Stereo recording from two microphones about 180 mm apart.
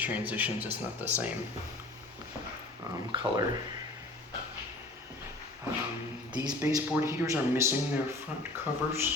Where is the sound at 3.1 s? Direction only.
30° right (ahead or behind).